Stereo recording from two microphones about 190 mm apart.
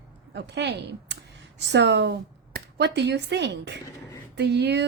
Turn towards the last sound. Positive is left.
turn(degrees=-60)  # may be behind; listen again after turning